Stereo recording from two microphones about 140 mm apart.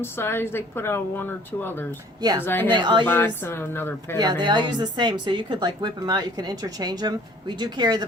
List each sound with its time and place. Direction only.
0.0 s speech: 15° left (ahead or behind)
2.7 s speech: 35° right (ahead or behind)
3.1 s speech: 15° left (ahead or behind)
4.2 s speech: 30° right (ahead or behind)